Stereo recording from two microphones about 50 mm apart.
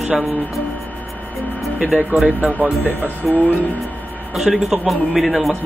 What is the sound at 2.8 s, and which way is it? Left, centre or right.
Speech, right.